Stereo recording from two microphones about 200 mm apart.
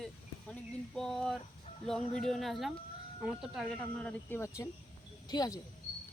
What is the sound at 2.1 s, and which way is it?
Speech, centre (ahead or behind).